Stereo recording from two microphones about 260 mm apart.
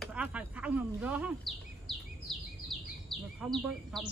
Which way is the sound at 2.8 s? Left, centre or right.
Centre.